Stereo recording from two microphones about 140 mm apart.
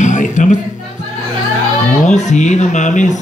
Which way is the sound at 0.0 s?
60° left (ahead or behind).